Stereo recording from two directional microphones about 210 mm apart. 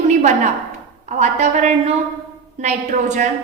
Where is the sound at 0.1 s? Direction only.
35° right (ahead or behind).